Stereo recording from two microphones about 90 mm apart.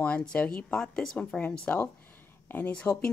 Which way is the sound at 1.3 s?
20° left (ahead or behind).